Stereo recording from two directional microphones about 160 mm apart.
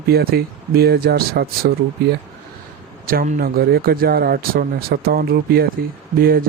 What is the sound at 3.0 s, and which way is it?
Speech, 60° right (ahead or behind).